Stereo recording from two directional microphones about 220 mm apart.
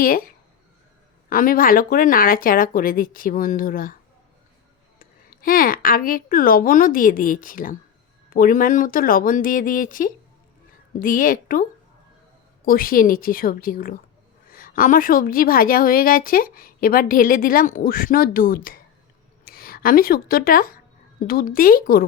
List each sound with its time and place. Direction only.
1.3 s a woman's voice: 40° left (ahead or behind)
4.9 s a woman's voice: 40° left (ahead or behind)
12.6 s a woman's voice: 40° left (ahead or behind)